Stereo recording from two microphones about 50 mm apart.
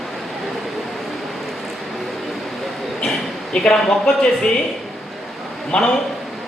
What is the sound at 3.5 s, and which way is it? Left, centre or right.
Speech, centre.